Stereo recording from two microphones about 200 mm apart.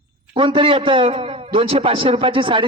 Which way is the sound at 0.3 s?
25° right (ahead or behind).